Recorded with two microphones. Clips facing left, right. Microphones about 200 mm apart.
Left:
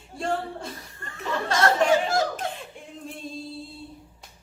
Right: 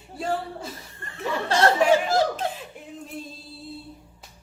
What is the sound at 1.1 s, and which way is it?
Speech, 30° right (ahead or behind).